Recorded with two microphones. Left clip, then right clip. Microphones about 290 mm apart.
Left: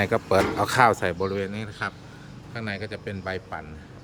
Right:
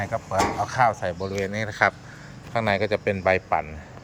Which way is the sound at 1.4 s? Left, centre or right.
Centre.